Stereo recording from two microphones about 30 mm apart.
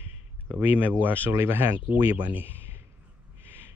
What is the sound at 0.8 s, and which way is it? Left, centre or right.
Speech, right.